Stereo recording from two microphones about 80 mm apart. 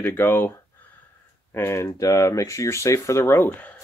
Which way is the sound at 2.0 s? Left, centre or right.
Left.